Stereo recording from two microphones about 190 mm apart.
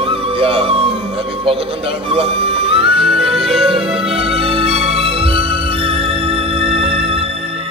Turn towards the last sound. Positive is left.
turn(degrees=-30)  # may be behind; listen again after turning